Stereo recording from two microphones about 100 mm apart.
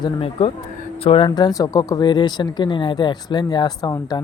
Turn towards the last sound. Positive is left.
turn(degrees=40)  # may be behind; listen again after turning